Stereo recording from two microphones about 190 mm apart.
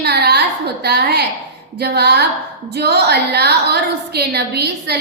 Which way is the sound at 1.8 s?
60° right (ahead or behind).